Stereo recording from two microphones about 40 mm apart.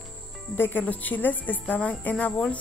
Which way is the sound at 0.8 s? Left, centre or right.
Left.